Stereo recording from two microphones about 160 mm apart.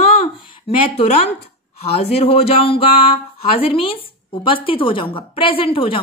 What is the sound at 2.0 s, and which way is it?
A woman's voice, 40° left (ahead or behind).